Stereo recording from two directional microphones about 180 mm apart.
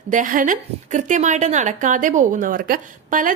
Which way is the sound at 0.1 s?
45° right (ahead or behind).